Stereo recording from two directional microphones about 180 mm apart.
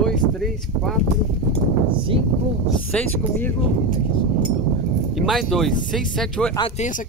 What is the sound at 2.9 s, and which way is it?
Speech, 10° left (ahead or behind).